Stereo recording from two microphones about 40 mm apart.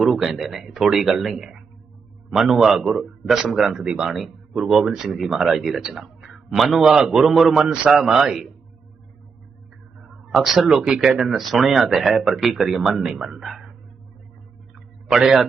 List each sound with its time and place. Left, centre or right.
0.0 s speech: centre
3.8 s speech: right
4.7 s speech: centre
10.0 s a sound: centre
10.8 s speech: centre
11.3 s speech: centre
15.0 s a man's voice: centre